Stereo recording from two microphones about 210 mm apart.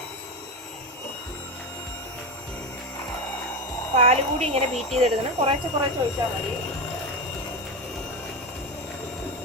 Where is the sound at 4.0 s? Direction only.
30° right (ahead or behind).